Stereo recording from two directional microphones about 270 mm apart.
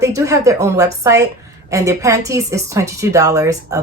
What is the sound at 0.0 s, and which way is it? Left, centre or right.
Speech, centre.